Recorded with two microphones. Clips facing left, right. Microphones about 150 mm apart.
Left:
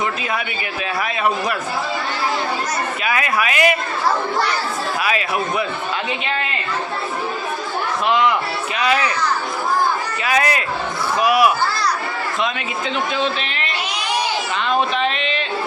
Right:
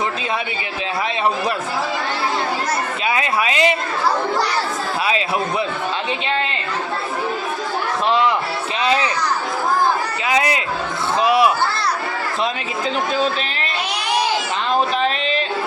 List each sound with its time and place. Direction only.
3.1 s speech: 25° right (ahead or behind)
8.8 s a child's voice: 25° right (ahead or behind)
10.2 s speech: 20° right (ahead or behind)
14.7 s a sound: 35° right (ahead or behind)